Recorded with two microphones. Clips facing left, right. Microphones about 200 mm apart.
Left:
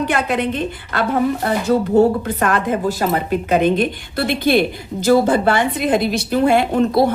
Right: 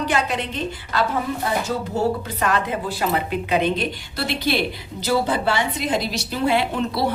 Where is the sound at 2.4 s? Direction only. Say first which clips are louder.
Left 5 dB; 50° left (ahead or behind).